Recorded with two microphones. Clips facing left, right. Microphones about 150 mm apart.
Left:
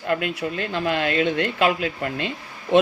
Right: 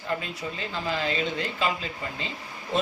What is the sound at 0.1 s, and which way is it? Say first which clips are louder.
Speech: left 7 dB; 65° left (ahead or behind).